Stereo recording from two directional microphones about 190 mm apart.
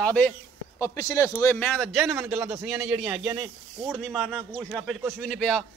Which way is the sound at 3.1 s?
15° right (ahead or behind).